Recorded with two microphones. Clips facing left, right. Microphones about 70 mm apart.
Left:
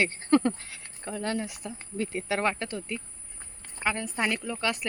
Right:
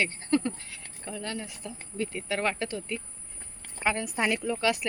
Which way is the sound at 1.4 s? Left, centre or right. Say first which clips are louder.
Left 2 dB; centre.